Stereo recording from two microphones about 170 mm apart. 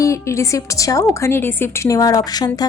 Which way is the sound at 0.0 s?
15° left (ahead or behind).